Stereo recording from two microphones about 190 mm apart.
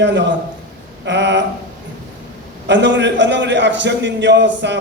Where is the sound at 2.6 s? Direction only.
65° right (ahead or behind).